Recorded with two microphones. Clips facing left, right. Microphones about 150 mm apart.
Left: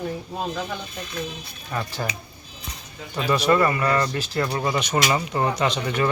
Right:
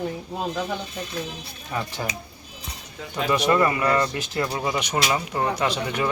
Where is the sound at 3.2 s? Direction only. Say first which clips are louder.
Left 1 dB; 20° right (ahead or behind).